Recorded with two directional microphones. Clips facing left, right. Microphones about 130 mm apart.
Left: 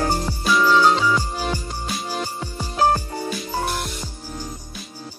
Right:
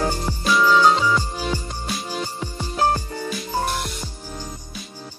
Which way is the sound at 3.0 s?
40° left (ahead or behind).